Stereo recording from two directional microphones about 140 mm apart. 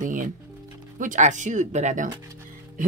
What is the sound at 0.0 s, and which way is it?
Music, 70° right (ahead or behind).